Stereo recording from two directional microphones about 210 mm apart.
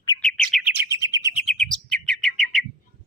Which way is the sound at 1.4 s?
Centre (ahead or behind).